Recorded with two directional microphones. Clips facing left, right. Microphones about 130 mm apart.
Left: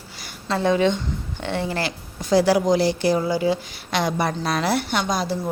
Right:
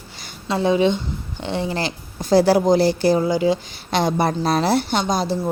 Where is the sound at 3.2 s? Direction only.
20° right (ahead or behind).